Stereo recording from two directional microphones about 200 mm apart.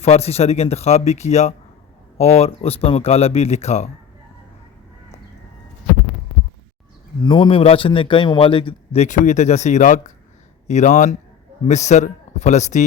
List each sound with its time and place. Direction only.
0.0 s speech: 30° left (ahead or behind)
7.3 s a man's voice: 25° left (ahead or behind)